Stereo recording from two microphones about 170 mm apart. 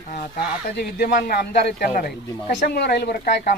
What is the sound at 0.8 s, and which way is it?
Speech, 60° left (ahead or behind).